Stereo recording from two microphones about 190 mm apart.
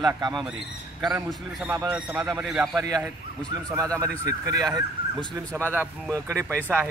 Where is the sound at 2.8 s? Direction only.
20° right (ahead or behind).